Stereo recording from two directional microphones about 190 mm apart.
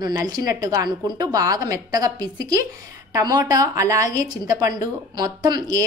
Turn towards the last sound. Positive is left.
turn(degrees=-20)  # may be behind; listen again after turning